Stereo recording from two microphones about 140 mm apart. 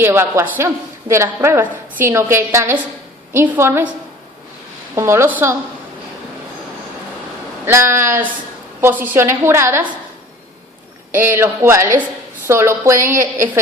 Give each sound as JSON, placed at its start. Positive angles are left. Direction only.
{"t": 0.0, "sound": "a woman's voice", "side_deg": -15}
{"t": 4.9, "sound": "a woman's voice", "side_deg": -20}
{"t": 7.6, "sound": "a woman's voice", "side_deg": -20}
{"t": 11.1, "sound": "a woman's voice", "side_deg": -15}